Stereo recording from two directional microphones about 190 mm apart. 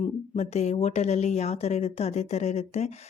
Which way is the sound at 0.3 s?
35° left (ahead or behind).